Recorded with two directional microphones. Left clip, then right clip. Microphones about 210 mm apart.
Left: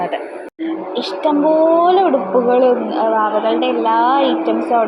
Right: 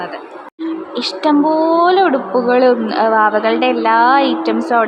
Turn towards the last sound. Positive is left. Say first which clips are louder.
# right 1 dB
turn(degrees=-20)  # may be behind; listen again after turning